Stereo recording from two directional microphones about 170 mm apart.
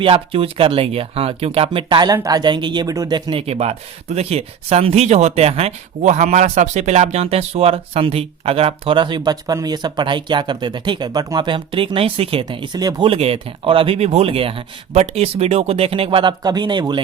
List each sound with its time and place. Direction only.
0.0 s speech: 30° right (ahead or behind)